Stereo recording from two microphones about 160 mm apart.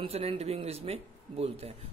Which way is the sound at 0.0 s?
35° right (ahead or behind).